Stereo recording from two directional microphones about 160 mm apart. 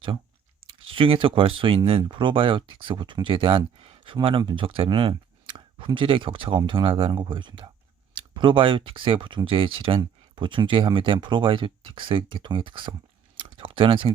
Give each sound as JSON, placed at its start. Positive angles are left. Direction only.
{"t": 0.9, "sound": "speech", "side_deg": -35}
{"t": 13.3, "sound": "clicking", "side_deg": -30}